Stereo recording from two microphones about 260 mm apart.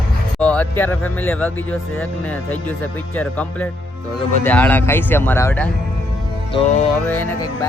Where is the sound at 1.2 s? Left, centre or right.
Centre.